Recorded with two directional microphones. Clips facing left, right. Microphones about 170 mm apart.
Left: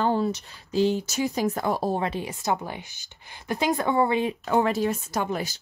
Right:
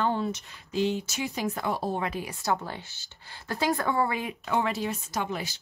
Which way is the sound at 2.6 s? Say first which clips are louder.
Left 3 dB; 15° left (ahead or behind).